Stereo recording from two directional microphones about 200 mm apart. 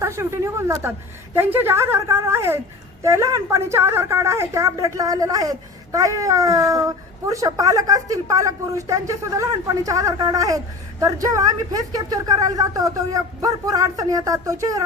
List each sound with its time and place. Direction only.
0.0 s a child's voice: 15° right (ahead or behind)